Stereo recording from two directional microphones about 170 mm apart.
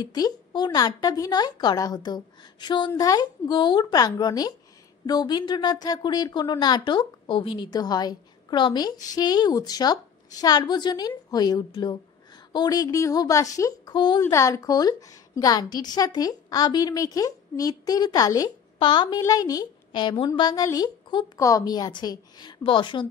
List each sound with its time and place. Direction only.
0.0 s a woman's voice: 25° left (ahead or behind)